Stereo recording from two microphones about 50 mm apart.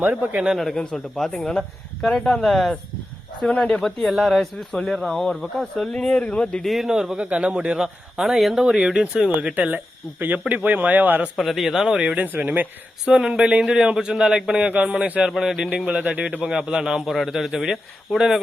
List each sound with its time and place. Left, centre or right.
0.4 s speech: centre
3.8 s speech: centre
6.0 s speech: centre
6.6 s speech: centre
7.3 s speech: right
11.3 s speech: centre
11.9 s speech: centre
12.1 s speech: right
13.1 s speech: centre
15.4 s speech: centre
15.9 s speech: right